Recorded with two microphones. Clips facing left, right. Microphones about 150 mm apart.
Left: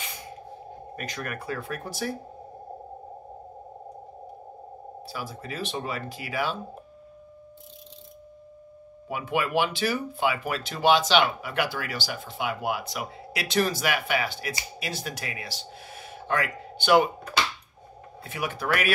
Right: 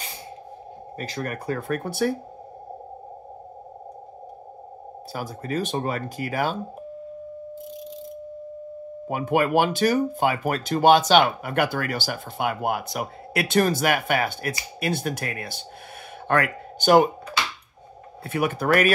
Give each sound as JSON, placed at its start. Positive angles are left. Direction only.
{"t": 0.9, "sound": "speech", "side_deg": -30}
{"t": 5.1, "sound": "speech", "side_deg": -45}
{"t": 9.0, "sound": "speech", "side_deg": -45}
{"t": 16.8, "sound": "speech", "side_deg": -45}
{"t": 18.2, "sound": "speech", "side_deg": -50}